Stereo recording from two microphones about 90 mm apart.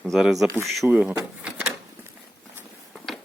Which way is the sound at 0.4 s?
35° right (ahead or behind).